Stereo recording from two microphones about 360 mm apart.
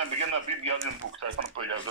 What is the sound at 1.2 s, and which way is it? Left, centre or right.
Speech, right.